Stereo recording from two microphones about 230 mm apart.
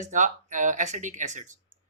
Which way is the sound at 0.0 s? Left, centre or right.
Right.